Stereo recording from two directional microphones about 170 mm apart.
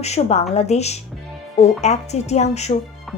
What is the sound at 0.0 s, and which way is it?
A woman's voice, 40° left (ahead or behind).